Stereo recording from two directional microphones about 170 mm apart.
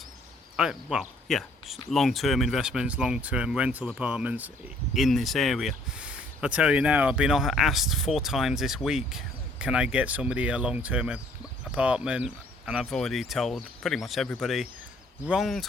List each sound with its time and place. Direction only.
0.5 s speech: 5° right (ahead or behind)